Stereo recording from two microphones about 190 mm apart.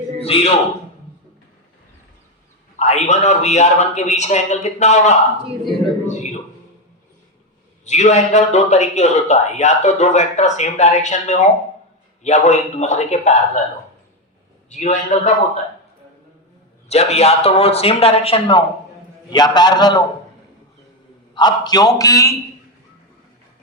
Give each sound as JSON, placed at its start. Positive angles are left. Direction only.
{"t": 0.3, "sound": "a man's voice", "side_deg": 30}
{"t": 2.7, "sound": "a man's voice", "side_deg": 35}
{"t": 7.9, "sound": "a man's voice", "side_deg": 35}
{"t": 14.7, "sound": "a man's voice", "side_deg": 40}
{"t": 16.9, "sound": "a man's voice", "side_deg": 35}
{"t": 21.3, "sound": "a man's voice", "side_deg": 20}